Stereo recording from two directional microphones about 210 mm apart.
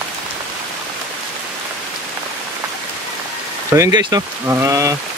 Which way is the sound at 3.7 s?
15° right (ahead or behind).